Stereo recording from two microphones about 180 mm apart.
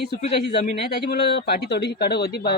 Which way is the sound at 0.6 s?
65° left (ahead or behind).